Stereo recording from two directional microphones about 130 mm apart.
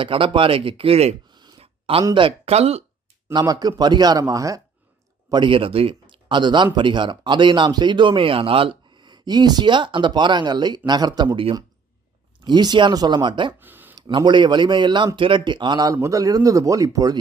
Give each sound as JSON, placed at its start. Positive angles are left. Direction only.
{"t": 0.0, "sound": "speech", "side_deg": -40}
{"t": 1.3, "sound": "a sound", "side_deg": -35}
{"t": 1.6, "sound": "a sound", "side_deg": -45}
{"t": 2.1, "sound": "speech", "side_deg": -45}
{"t": 3.3, "sound": "speech", "side_deg": -30}
{"t": 5.3, "sound": "a man's voice", "side_deg": -40}
{"t": 12.5, "sound": "speech", "side_deg": -35}
{"t": 13.6, "sound": "a sound", "side_deg": -15}
{"t": 13.9, "sound": "speech", "side_deg": -35}